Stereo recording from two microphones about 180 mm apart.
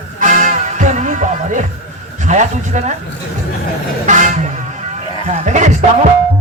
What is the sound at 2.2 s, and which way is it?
Speech, 40° right (ahead or behind).